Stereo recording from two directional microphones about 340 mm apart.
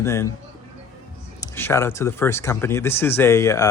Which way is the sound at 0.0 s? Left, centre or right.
Centre.